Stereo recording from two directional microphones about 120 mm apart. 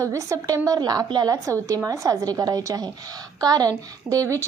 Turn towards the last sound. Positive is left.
turn(degrees=-25)  # may be behind; listen again after turning